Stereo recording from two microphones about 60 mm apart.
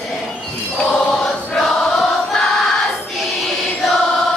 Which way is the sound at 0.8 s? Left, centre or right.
Centre.